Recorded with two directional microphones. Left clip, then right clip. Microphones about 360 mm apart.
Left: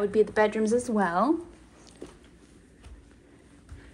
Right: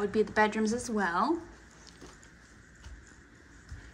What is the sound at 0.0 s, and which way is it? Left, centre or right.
A woman's voice, centre.